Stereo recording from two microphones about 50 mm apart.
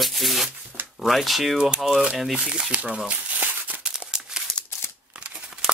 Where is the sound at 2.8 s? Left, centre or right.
Right.